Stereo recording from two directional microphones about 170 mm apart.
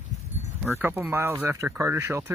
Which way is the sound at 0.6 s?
15° right (ahead or behind).